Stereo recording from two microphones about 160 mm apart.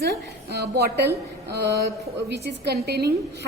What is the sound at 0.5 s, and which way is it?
A woman's voice, 90° right.